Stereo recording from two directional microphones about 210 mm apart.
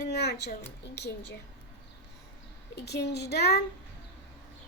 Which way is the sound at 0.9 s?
50° left (ahead or behind).